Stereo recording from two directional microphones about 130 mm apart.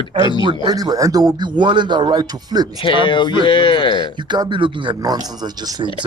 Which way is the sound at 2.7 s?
40° left (ahead or behind).